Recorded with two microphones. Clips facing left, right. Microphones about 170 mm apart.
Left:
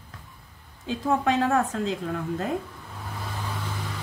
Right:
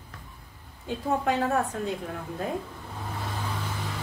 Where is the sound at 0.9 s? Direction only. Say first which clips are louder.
Left 3 dB; 90° left.